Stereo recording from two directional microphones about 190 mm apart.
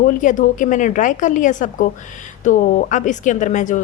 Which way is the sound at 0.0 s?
45° left (ahead or behind).